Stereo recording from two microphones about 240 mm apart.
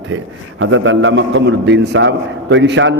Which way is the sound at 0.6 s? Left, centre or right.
Right.